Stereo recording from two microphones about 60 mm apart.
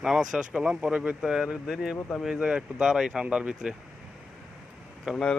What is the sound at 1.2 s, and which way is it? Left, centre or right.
Speech, centre.